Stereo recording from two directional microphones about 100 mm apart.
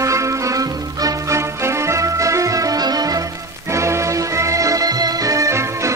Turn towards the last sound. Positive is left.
turn(degrees=-30)  # may be behind; listen again after turning